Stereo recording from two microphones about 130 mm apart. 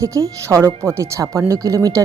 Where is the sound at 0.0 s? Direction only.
25° right (ahead or behind).